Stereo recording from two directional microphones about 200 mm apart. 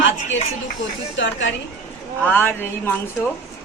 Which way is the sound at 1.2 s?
70° left (ahead or behind).